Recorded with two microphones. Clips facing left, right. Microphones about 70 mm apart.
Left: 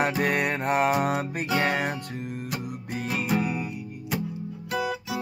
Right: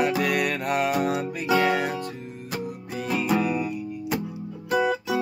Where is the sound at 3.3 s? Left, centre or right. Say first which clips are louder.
Right 3 dB; right.